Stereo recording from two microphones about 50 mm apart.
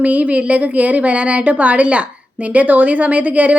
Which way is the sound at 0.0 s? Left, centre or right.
Right.